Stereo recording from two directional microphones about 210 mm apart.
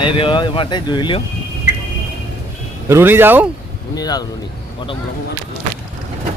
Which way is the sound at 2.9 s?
10° right (ahead or behind).